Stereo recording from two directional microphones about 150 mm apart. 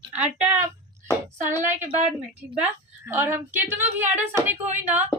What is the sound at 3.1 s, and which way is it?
A woman's voice, 15° right (ahead or behind).